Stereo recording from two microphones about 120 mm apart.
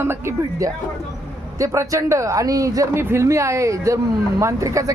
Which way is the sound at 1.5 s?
25° right (ahead or behind).